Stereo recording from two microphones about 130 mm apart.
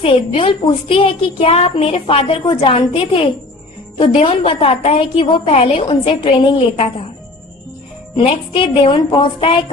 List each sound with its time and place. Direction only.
0.0 s a woman's voice: 45° left (ahead or behind)
8.1 s speech: 40° left (ahead or behind)